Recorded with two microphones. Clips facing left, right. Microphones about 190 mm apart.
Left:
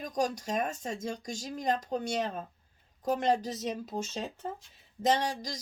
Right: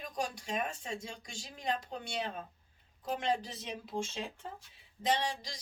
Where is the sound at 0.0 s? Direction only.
40° left (ahead or behind).